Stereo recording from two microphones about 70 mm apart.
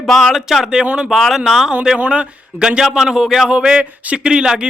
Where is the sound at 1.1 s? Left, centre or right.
Centre.